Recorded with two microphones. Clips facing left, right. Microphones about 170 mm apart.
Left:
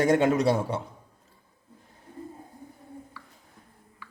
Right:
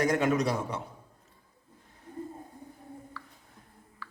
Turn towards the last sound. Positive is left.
turn(degrees=15)  # may be behind; listen again after turning